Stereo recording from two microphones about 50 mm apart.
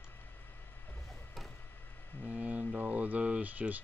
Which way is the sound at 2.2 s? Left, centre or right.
Right.